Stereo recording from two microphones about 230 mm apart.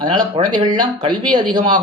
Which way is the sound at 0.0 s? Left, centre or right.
Centre.